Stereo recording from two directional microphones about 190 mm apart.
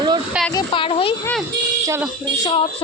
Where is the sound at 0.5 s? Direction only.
25° left (ahead or behind).